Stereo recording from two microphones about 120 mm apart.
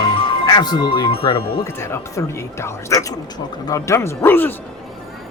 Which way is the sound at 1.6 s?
25° left (ahead or behind).